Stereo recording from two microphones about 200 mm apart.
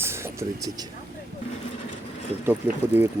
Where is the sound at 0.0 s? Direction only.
15° right (ahead or behind).